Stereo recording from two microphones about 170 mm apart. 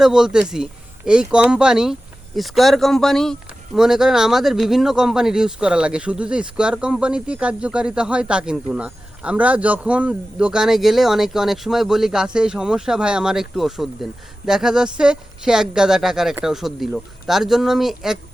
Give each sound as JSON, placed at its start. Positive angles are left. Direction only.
{"t": 0.0, "sound": "speech", "side_deg": -5}